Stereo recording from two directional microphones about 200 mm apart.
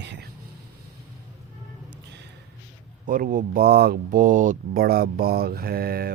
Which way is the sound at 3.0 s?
45° right (ahead or behind).